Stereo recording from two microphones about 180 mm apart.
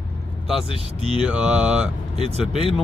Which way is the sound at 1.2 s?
5° right (ahead or behind).